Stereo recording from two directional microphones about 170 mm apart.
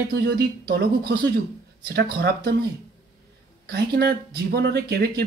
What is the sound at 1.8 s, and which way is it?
Speech, 70° right (ahead or behind).